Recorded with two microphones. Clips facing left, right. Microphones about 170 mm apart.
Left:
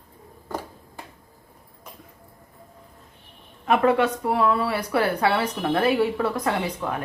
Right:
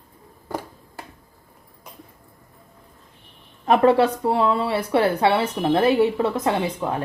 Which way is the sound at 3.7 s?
30° right (ahead or behind).